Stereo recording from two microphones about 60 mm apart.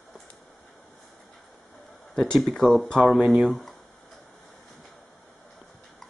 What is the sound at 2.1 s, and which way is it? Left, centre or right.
Speech, centre.